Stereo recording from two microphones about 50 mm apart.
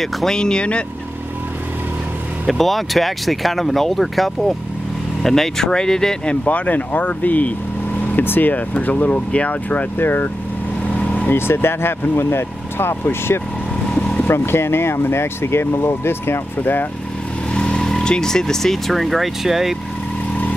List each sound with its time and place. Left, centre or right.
0.0 s speech: centre
2.5 s speech: centre
6.4 s speech: left
9.9 s speech: left
13.9 s vehicle: left
14.2 s speech: left
17.6 s speech: centre